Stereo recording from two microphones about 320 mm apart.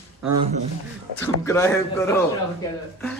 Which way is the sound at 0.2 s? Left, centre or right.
Right.